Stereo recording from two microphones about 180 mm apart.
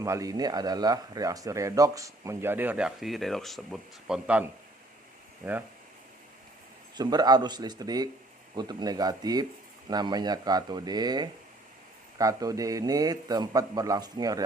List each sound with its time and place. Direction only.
0.0 s speech: 20° right (ahead or behind)
6.9 s a man's voice: 20° right (ahead or behind)